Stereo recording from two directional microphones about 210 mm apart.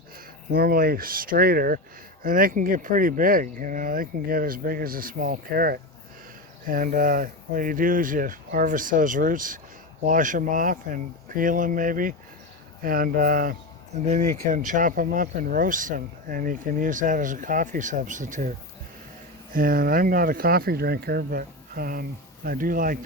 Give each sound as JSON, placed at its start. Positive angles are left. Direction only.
{"t": 0.5, "sound": "speech", "side_deg": -45}
{"t": 19.5, "sound": "speech", "side_deg": -45}